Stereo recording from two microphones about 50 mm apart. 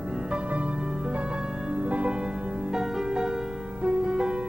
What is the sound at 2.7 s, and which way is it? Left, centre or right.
Music, centre.